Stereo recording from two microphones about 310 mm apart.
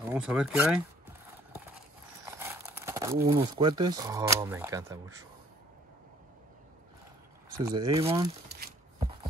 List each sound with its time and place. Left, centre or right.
0.1 s speech: centre
2.3 s a sound: centre
3.3 s speech: centre
7.6 s speech: centre